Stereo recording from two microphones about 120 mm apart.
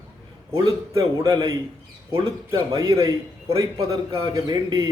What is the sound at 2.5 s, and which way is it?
A man's voice, 25° right (ahead or behind).